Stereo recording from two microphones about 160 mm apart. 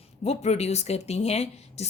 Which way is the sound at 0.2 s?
40° left (ahead or behind).